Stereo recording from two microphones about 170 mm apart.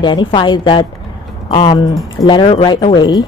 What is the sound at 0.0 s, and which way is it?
A woman's voice, 25° left (ahead or behind).